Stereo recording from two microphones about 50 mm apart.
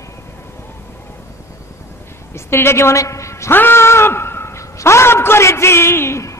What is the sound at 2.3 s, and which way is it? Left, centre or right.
A woman's voice, left.